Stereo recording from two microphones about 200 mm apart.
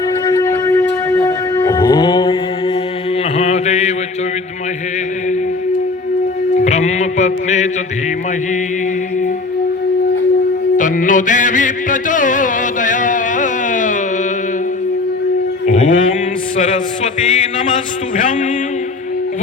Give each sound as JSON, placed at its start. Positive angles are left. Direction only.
{"t": 0.3, "sound": "music", "side_deg": 15}
{"t": 3.3, "sound": "chant", "side_deg": 35}
{"t": 6.7, "sound": "music", "side_deg": 35}
{"t": 10.8, "sound": "music", "side_deg": 40}
{"t": 15.6, "sound": "a sound", "side_deg": 35}
{"t": 18.2, "sound": "music", "side_deg": 40}